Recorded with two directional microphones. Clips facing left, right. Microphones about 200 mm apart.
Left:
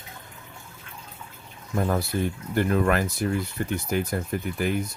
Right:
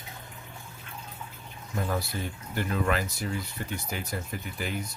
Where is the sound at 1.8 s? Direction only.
50° left (ahead or behind).